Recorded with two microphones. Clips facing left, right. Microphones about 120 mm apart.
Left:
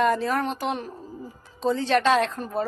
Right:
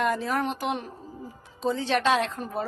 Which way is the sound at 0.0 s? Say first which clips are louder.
Left 3 dB; 10° right (ahead or behind).